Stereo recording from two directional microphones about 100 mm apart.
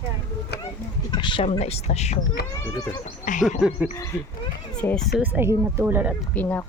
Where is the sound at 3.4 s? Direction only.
10° right (ahead or behind).